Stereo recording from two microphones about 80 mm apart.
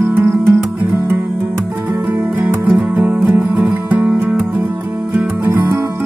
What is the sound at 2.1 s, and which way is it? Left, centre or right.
Music, right.